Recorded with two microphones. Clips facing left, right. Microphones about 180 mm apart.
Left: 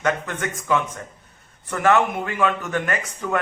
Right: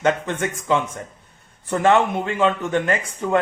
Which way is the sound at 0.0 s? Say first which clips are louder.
Right 3 dB; 25° right (ahead or behind).